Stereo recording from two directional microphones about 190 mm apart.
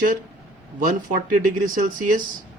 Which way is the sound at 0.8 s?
40° right (ahead or behind).